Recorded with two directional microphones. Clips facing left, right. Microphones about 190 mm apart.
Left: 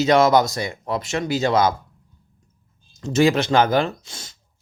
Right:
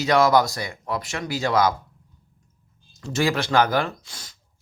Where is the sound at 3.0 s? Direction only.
20° left (ahead or behind).